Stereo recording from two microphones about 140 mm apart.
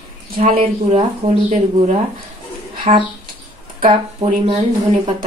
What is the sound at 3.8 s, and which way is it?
Speech, 35° right (ahead or behind).